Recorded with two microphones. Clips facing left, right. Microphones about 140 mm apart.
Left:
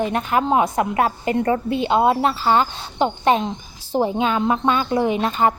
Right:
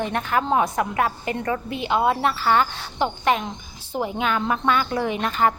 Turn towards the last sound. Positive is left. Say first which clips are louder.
# left 3 dB
turn(degrees=25)  # may be behind; listen again after turning